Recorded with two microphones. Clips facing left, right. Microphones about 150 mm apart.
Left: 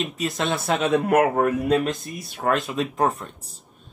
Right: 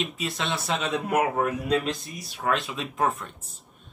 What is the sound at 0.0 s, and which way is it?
Speech, centre (ahead or behind).